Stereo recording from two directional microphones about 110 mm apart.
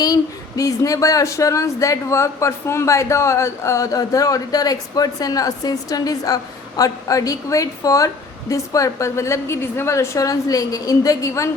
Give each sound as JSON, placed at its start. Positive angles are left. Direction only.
{"t": 0.0, "sound": "speech", "side_deg": 35}